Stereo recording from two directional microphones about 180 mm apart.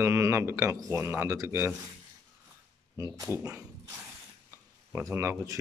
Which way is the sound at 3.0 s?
15° right (ahead or behind).